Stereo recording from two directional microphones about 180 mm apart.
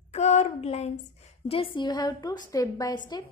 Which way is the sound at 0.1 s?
35° left (ahead or behind).